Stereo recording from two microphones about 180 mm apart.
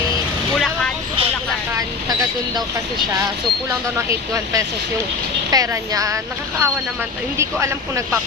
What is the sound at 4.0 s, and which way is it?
Speech, 15° right (ahead or behind).